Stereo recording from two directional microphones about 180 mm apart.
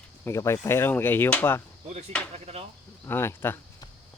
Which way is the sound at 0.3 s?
15° left (ahead or behind).